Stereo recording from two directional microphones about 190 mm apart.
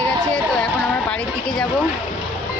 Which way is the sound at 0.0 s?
5° left (ahead or behind).